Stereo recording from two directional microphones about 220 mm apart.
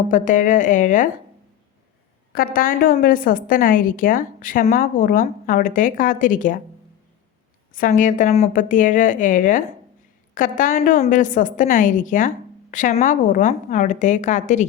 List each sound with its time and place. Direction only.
0.1 s a woman's voice: 35° left (ahead or behind)
2.3 s a woman's voice: 40° left (ahead or behind)
7.7 s a woman's voice: 40° left (ahead or behind)